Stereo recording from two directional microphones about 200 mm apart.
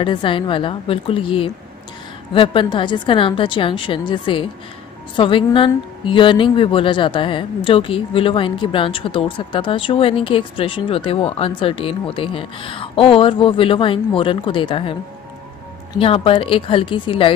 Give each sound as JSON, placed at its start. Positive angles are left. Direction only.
{"t": 0.0, "sound": "a woman's voice", "side_deg": 25}
{"t": 16.0, "sound": "a woman's voice", "side_deg": 25}